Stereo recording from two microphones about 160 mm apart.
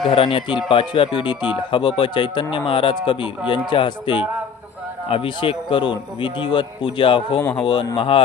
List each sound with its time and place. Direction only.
0.1 s a man's voice: 35° left (ahead or behind)